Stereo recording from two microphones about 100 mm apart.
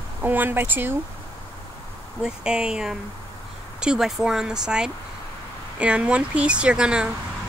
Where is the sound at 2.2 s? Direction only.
10° right (ahead or behind).